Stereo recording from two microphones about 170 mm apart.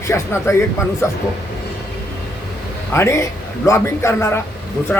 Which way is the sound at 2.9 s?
15° left (ahead or behind).